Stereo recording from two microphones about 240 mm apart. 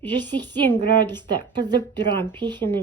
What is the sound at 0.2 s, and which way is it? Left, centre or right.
A woman's voice, centre.